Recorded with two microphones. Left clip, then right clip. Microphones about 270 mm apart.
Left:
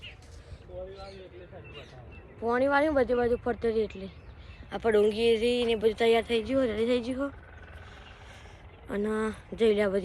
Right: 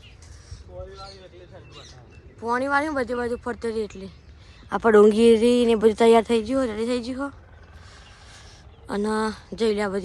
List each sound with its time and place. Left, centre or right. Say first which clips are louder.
2.4 s speech: right 2 dB; centre
4.7 s a man's voice: right 9 dB; centre
8.9 s a woman's voice: right 5 dB; centre